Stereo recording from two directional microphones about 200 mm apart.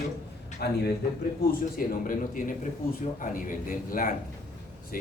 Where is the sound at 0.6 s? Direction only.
55° left (ahead or behind).